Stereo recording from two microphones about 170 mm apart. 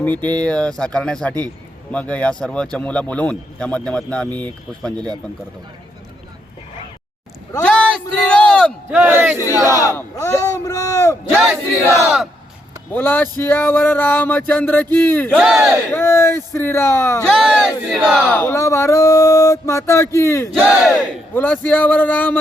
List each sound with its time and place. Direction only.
0.0 s a man's voice: 10° left (ahead or behind)
7.6 s speech: 5° left (ahead or behind)
8.9 s battle cry: 10° right (ahead or behind)
9.8 s speech: 15° left (ahead or behind)
11.5 s battle cry: 15° right (ahead or behind)
12.9 s a man's voice: 10° left (ahead or behind)
15.4 s battle cry: 5° right (ahead or behind)
15.9 s a man's voice: 15° left (ahead or behind)
17.2 s battle cry: 5° left (ahead or behind)
18.3 s a man's voice: 15° left (ahead or behind)
20.5 s battle cry: centre (ahead or behind)
21.3 s a man's voice: 10° left (ahead or behind)